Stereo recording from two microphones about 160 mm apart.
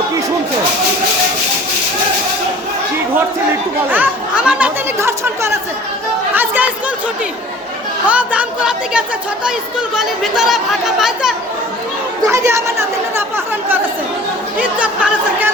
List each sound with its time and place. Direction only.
3.9 s speech: 10° right (ahead or behind)
8.0 s speech: 10° right (ahead or behind)
12.3 s speech: 20° right (ahead or behind)